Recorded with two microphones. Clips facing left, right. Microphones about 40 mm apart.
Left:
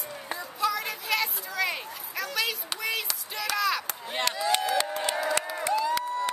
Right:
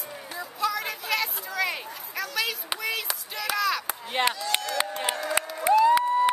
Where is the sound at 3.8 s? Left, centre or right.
Centre.